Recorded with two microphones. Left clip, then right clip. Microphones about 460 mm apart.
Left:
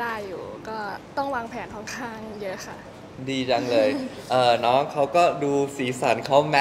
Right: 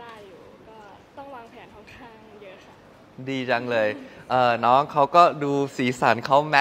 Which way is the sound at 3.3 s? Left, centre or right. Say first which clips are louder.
Left 1 dB; right.